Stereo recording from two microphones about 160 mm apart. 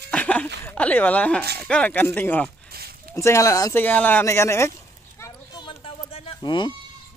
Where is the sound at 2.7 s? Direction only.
75° right (ahead or behind).